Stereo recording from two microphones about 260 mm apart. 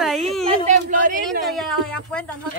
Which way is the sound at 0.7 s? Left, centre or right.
Right.